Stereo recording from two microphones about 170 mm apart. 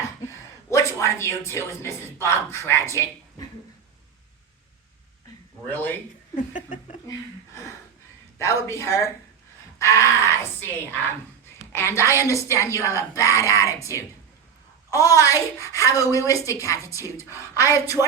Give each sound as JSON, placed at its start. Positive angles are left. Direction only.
{"t": 0.7, "sound": "speech", "side_deg": 15}
{"t": 5.6, "sound": "speech", "side_deg": 10}
{"t": 6.3, "sound": "a sound", "side_deg": 50}
{"t": 8.4, "sound": "a woman's voice", "side_deg": 15}